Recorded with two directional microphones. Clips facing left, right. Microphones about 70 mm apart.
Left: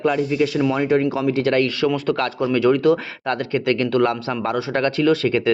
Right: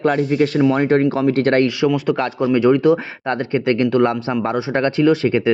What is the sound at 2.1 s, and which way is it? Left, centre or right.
Speech, right.